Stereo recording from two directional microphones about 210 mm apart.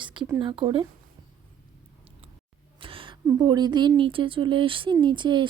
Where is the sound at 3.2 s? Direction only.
20° right (ahead or behind).